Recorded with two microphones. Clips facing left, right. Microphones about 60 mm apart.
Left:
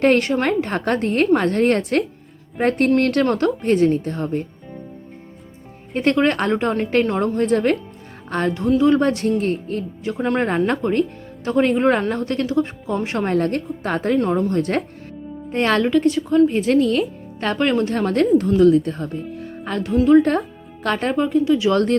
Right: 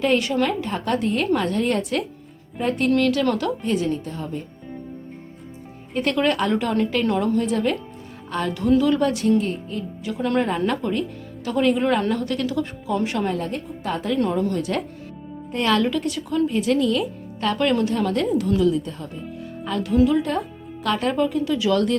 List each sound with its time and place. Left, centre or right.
0.0 s a woman's voice: left
6.0 s a woman's voice: left
7.2 s a woman's voice: left
8.3 s music: left
8.8 s a woman's voice: left
10.0 s a woman's voice: left
13.2 s a woman's voice: left
14.2 s a woman's voice: left
14.5 s a woman's voice: left
17.9 s a woman's voice: left
18.7 s a woman's voice: left
21.1 s speech: left